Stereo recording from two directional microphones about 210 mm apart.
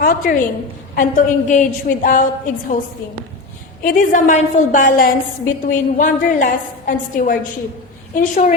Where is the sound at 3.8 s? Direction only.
40° left (ahead or behind).